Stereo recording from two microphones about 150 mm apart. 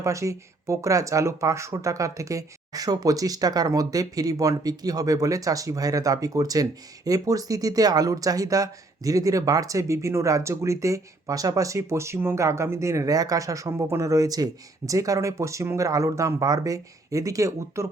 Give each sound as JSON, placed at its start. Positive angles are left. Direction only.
{"t": 0.0, "sound": "speech", "side_deg": -20}